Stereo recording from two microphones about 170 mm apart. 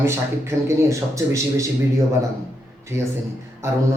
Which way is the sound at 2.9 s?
15° right (ahead or behind).